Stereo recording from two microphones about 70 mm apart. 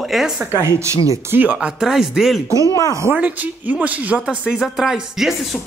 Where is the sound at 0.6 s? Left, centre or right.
Right.